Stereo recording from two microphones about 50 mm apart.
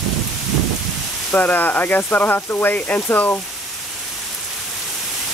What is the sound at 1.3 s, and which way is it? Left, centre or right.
Speech, left.